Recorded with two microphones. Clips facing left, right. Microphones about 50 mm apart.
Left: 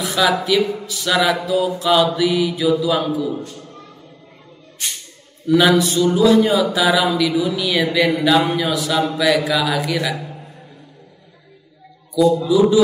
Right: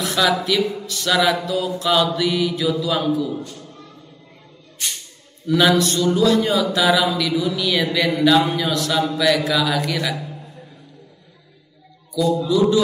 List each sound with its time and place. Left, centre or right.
0.0 s speech: centre
0.6 s speech: left
0.8 s speech: centre
3.3 s a man's voice: centre
5.5 s speech: centre
10.2 s a sound: left
12.1 s a man's voice: centre